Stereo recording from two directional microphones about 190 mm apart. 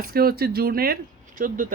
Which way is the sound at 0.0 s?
55° right (ahead or behind).